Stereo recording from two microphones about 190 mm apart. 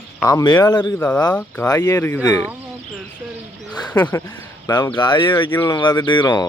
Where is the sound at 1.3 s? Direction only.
5° left (ahead or behind).